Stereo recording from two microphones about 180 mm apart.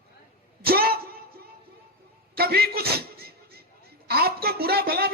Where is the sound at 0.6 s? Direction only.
60° right (ahead or behind).